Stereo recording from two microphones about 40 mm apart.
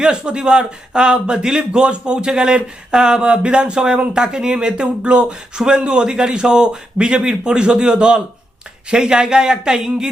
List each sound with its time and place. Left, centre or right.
0.0 s speech: right